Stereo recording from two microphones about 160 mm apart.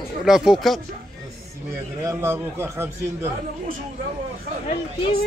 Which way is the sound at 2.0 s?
15° right (ahead or behind).